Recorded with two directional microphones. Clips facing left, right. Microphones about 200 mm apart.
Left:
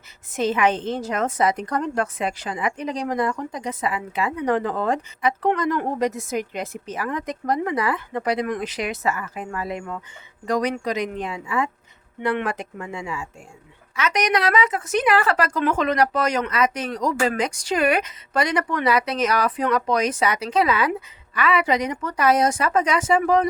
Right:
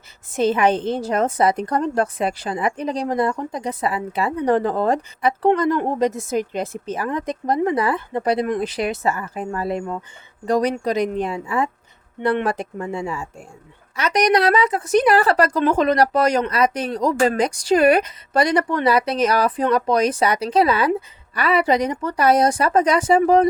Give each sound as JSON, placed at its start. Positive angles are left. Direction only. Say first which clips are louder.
{"t": 0.3, "sound": "a woman's voice", "louder": "right 3 dB", "side_deg": -30}